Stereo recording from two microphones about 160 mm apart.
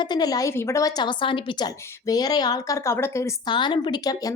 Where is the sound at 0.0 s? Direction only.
25° left (ahead or behind).